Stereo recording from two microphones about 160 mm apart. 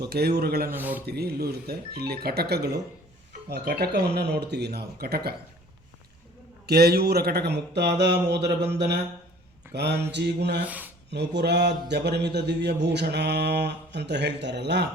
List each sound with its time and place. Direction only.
0.0 s speech: 85° right
0.7 s a man's voice: 10° right (ahead or behind)
1.0 s a man's voice: 80° right
6.7 s a man's voice: 80° right
10.7 s a sound: 10° right (ahead or behind)
11.1 s a man's voice: 90° right